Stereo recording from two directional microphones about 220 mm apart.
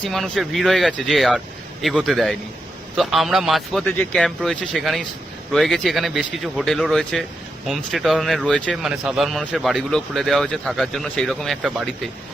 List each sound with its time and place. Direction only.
0.0 s speech: centre (ahead or behind)